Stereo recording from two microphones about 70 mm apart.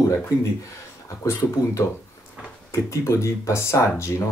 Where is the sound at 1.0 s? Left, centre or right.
Left.